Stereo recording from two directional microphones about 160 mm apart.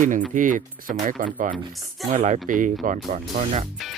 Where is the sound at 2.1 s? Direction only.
50° right (ahead or behind).